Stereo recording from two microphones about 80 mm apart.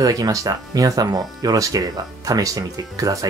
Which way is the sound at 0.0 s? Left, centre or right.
Right.